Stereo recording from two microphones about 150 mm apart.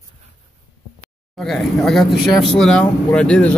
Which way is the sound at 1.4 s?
Centre (ahead or behind).